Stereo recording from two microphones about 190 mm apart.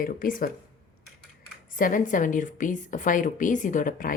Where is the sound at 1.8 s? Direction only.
45° left (ahead or behind).